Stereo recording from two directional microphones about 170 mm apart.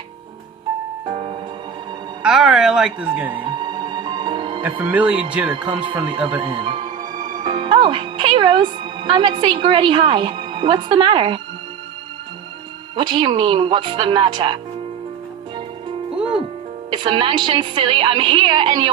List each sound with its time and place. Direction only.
1.0 s music: 30° right (ahead or behind)
2.2 s speech: 5° right (ahead or behind)
3.3 s music: 25° right (ahead or behind)
4.8 s speech: 10° right (ahead or behind)
5.5 s a woman's voice: 25° right (ahead or behind)
13.0 s a woman's voice: 30° right (ahead or behind)
16.9 s a woman's voice: 30° right (ahead or behind)